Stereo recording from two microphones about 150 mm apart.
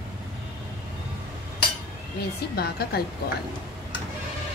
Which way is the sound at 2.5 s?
90° left.